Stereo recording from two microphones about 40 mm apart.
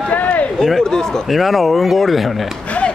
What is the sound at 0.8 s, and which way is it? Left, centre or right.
Speech, centre.